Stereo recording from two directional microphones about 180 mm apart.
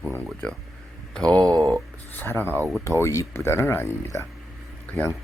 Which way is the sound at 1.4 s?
20° right (ahead or behind).